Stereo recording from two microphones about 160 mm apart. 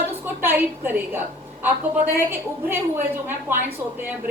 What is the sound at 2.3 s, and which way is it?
A woman's voice, 15° right (ahead or behind).